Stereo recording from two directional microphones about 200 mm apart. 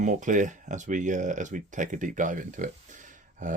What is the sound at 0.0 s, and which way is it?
Speech, 40° right (ahead or behind).